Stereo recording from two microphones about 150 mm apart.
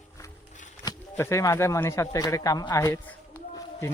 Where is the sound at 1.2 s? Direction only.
20° left (ahead or behind).